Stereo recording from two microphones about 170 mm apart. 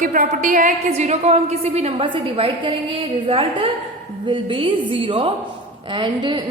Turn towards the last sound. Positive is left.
turn(degrees=-30)  # may be behind; listen again after turning